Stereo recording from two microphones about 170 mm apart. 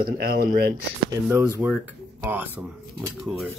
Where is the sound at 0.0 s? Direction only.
65° right (ahead or behind).